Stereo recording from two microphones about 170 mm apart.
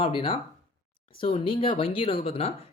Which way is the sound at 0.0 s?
30° left (ahead or behind).